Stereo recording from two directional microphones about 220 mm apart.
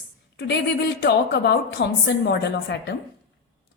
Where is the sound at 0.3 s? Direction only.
50° left (ahead or behind).